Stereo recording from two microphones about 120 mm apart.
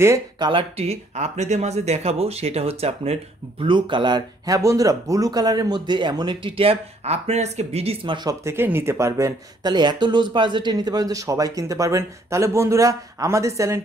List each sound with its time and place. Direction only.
0.4 s speech: 45° right (ahead or behind)
8.5 s speech: 20° right (ahead or behind)
9.6 s speech: 40° right (ahead or behind)